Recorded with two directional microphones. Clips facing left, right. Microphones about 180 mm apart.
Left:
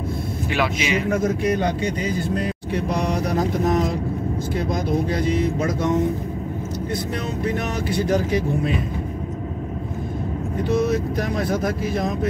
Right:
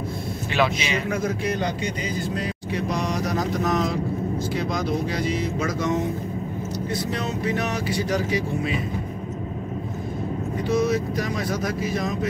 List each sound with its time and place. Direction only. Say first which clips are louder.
0.6 s speech: even; 10° left (ahead or behind)
2.9 s speech: left 3 dB; 55° left (ahead or behind)
7.4 s speech: left 2 dB; 50° left (ahead or behind)
10.9 s speech: left 2 dB; 50° left (ahead or behind)